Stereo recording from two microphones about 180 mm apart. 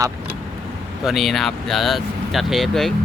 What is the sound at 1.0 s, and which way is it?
Speech, centre (ahead or behind).